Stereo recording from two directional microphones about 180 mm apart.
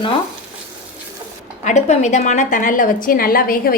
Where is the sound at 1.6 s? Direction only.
40° left (ahead or behind).